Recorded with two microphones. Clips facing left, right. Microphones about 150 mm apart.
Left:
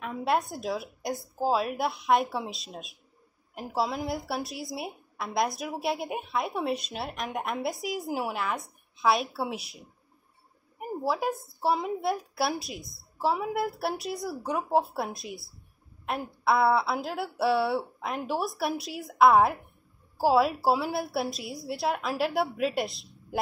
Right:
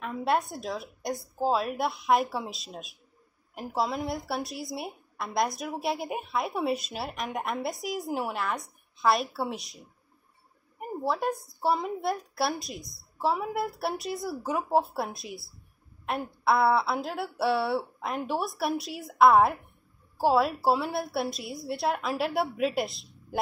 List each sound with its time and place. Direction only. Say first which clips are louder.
0.0 s a woman's voice: even; centre (ahead or behind)